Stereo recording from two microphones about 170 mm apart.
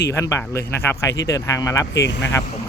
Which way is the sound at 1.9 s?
90° left.